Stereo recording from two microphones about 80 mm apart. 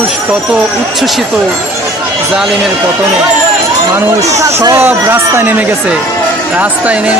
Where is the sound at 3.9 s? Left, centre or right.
Right.